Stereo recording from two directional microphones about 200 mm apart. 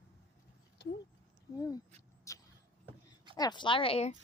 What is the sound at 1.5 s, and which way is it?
Speech, 15° left (ahead or behind).